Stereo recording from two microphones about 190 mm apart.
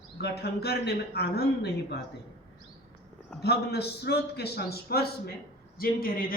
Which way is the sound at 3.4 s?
60° left (ahead or behind).